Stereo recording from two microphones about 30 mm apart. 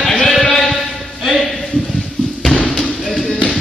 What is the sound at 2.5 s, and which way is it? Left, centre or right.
Thump, left.